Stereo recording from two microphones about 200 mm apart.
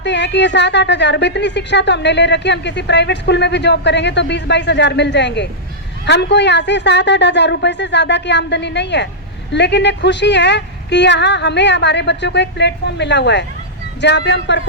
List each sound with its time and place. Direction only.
0.0 s a woman's voice: 60° left (ahead or behind)